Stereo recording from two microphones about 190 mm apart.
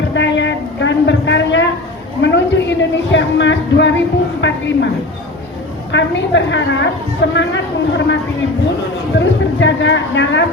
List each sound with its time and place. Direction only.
0.1 s a sound: 70° left (ahead or behind)
4.4 s speech: 70° left (ahead or behind)
5.9 s speech: 70° left (ahead or behind)